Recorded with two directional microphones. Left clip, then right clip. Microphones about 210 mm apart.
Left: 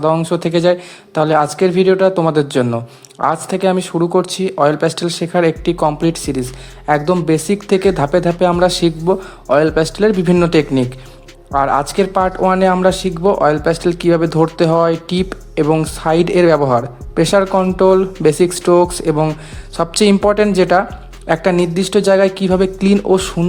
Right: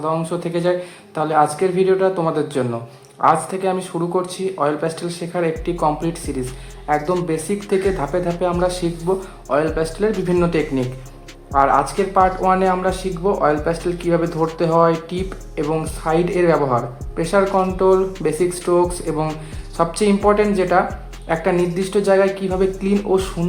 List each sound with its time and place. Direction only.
0.0 s speech: 40° left (ahead or behind)